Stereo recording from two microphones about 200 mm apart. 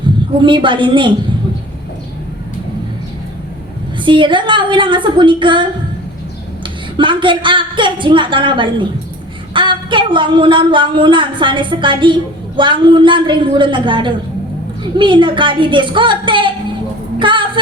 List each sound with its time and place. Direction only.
0.3 s a woman's voice: 25° right (ahead or behind)
4.0 s a woman's voice: 25° right (ahead or behind)
6.9 s a woman's voice: 25° right (ahead or behind)
17.2 s a sound: 25° right (ahead or behind)